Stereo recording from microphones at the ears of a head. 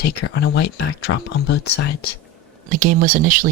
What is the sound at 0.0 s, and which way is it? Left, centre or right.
Speech, left.